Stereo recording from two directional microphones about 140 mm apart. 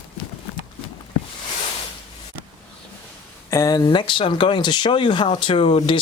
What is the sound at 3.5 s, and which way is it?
Speech, 20° left (ahead or behind).